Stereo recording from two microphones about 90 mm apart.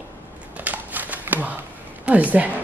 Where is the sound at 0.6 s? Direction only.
20° right (ahead or behind).